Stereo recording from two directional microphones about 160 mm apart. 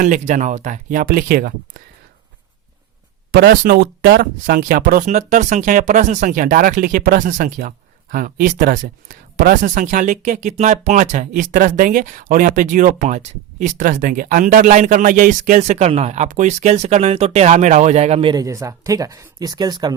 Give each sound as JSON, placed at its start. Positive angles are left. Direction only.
{"t": 0.0, "sound": "speech", "side_deg": -50}
{"t": 3.3, "sound": "speech", "side_deg": -70}